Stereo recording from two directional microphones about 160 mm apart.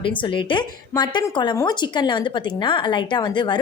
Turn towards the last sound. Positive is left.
turn(degrees=30)  # may be behind; listen again after turning